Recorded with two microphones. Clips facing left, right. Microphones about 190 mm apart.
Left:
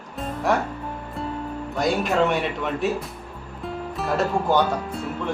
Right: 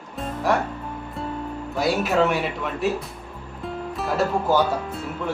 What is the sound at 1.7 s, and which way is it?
Speech, 5° right (ahead or behind).